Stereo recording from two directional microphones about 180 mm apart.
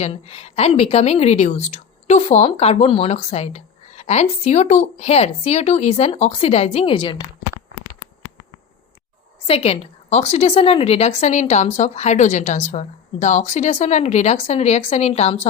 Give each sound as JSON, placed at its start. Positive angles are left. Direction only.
{"t": 0.0, "sound": "a woman's voice", "side_deg": 35}
{"t": 9.5, "sound": "a woman's voice", "side_deg": 35}